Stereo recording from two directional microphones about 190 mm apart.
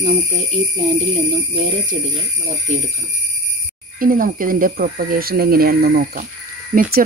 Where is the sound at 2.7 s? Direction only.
40° right (ahead or behind).